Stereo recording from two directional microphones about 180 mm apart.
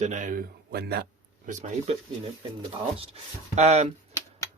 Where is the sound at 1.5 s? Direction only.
40° right (ahead or behind).